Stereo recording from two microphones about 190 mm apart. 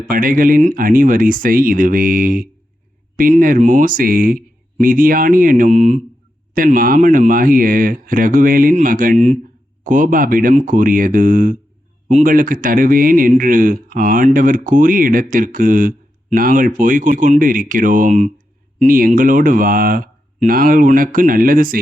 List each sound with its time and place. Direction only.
0.1 s speech: 45° right (ahead or behind)